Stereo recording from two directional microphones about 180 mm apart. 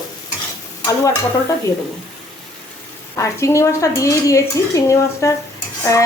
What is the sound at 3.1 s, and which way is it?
Dishes, 15° left (ahead or behind).